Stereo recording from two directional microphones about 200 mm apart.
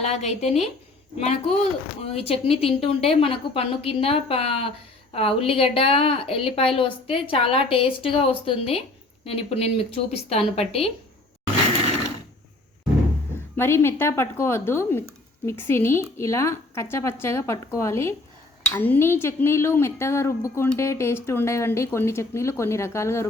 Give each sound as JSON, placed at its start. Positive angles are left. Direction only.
{"t": 0.0, "sound": "a woman's voice", "side_deg": 35}
{"t": 13.6, "sound": "speech", "side_deg": 15}